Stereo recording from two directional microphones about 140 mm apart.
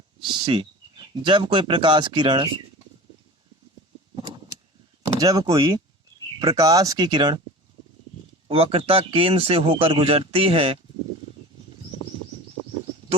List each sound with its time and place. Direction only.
0.2 s speech: 35° right (ahead or behind)
5.2 s speech: 25° right (ahead or behind)
8.4 s speech: 45° right (ahead or behind)